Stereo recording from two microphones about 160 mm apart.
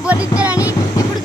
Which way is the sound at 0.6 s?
20° left (ahead or behind).